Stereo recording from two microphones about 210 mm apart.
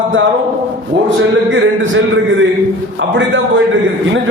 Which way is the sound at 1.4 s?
65° right (ahead or behind).